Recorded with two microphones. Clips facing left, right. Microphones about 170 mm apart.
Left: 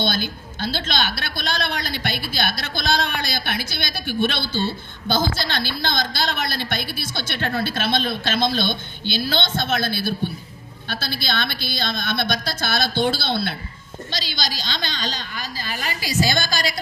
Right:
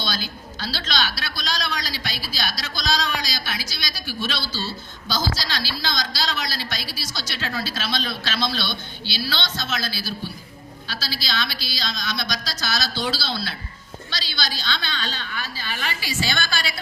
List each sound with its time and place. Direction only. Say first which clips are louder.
0.0 s a woman's voice: left 6 dB; 55° left (ahead or behind)